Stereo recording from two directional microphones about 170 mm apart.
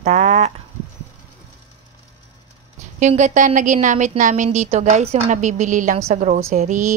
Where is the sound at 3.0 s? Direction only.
45° right (ahead or behind).